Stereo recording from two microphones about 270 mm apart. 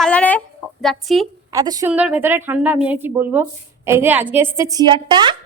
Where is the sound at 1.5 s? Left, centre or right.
Centre.